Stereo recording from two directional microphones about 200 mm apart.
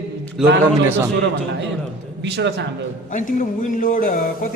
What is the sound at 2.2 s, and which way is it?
Speech, 60° right (ahead or behind).